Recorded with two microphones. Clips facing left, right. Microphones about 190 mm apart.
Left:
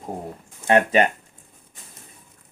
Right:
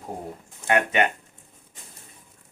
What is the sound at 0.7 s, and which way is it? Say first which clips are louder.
Speech: left 5 dB; 30° left (ahead or behind).